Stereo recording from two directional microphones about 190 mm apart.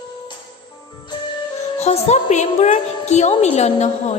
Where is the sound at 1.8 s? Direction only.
35° left (ahead or behind).